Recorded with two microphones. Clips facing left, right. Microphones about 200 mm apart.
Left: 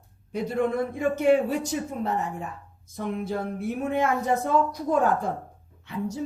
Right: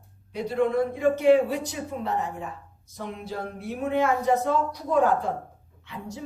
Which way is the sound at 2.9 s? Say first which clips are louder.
Left 5 dB; 50° left (ahead or behind).